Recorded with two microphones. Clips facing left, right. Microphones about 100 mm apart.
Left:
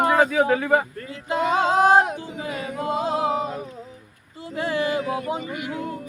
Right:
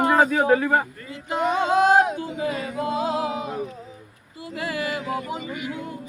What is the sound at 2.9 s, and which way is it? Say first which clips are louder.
Music: left 3 dB; 30° left (ahead or behind).